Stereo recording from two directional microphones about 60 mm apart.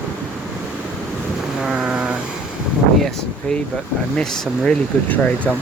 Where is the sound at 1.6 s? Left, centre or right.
Centre.